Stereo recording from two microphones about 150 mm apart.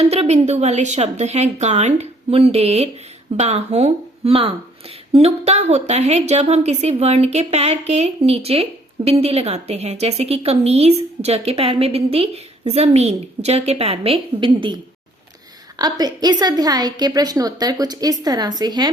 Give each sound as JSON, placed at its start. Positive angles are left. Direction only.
{"t": 0.0, "sound": "a woman's voice", "side_deg": -45}
{"t": 15.8, "sound": "a woman's voice", "side_deg": -25}